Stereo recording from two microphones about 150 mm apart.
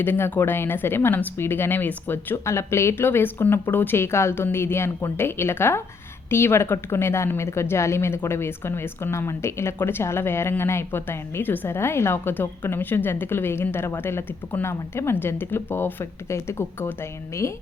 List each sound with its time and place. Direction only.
0.0 s a woman's voice: 15° left (ahead or behind)